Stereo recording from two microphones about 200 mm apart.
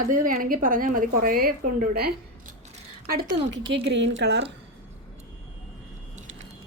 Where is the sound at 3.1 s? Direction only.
50° right (ahead or behind).